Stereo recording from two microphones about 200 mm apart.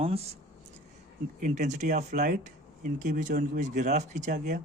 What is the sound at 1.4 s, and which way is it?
Speech, 40° right (ahead or behind).